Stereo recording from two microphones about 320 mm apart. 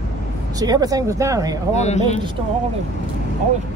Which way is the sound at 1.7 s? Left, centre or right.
Left.